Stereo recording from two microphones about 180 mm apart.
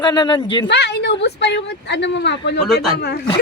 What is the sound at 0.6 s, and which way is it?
Speech, 70° left (ahead or behind).